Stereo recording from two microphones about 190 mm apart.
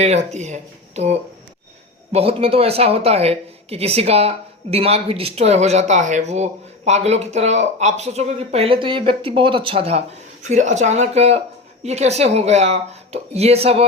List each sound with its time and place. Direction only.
0.0 s speech: 35° right (ahead or behind)